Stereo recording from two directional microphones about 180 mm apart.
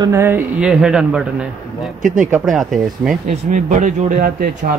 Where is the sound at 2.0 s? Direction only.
45° right (ahead or behind).